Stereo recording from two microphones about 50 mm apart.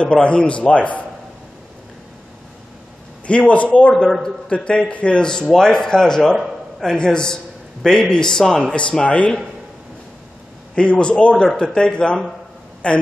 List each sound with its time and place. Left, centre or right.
0.0 s a man's voice: left
3.3 s a man's voice: left
10.7 s a man's voice: left